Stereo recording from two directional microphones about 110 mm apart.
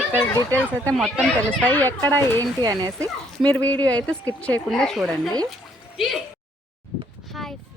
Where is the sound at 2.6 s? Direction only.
35° right (ahead or behind).